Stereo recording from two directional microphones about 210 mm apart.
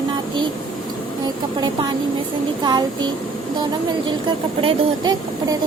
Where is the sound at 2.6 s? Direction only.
20° right (ahead or behind).